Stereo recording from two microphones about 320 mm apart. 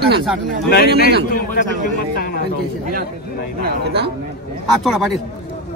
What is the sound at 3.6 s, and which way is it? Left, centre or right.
Speech, right.